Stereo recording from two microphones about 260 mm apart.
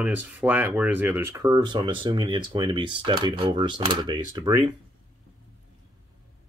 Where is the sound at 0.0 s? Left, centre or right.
Centre.